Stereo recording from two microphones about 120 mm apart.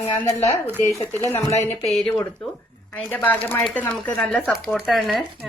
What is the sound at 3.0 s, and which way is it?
Speech, 15° left (ahead or behind).